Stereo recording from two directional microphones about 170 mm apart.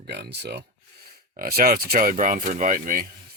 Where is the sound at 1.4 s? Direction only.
60° right (ahead or behind).